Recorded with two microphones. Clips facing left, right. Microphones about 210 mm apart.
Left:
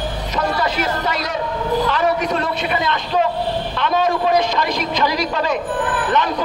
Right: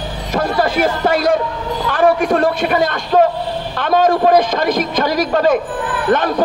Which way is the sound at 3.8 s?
50° right (ahead or behind).